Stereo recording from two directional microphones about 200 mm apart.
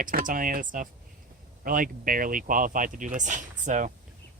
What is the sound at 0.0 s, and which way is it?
Speech, 40° right (ahead or behind).